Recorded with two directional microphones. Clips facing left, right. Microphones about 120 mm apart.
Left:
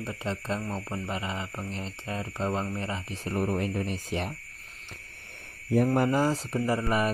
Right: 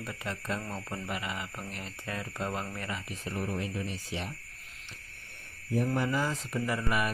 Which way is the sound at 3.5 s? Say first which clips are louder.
Left 6 dB; 50° left (ahead or behind).